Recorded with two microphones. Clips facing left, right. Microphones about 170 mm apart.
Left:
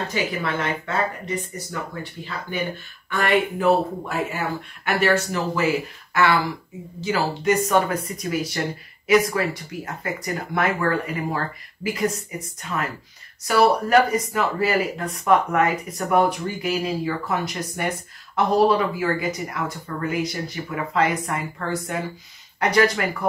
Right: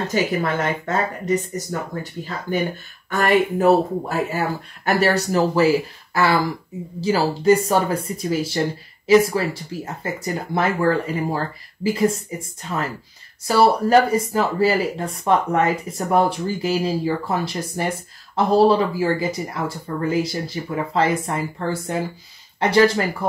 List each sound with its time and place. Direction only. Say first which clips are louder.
0.1 s speech: right 4 dB; 40° right (ahead or behind)